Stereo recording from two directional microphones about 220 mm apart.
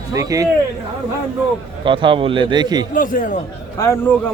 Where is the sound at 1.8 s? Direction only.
20° right (ahead or behind).